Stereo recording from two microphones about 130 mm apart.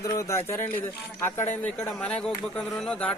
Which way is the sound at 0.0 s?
25° left (ahead or behind).